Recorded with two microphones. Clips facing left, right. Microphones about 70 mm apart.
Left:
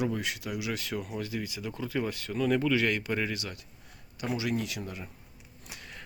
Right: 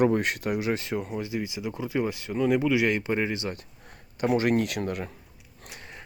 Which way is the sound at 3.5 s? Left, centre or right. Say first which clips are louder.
Right 8 dB; right.